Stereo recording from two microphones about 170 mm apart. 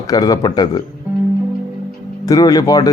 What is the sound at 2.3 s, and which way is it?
Speech, 20° left (ahead or behind).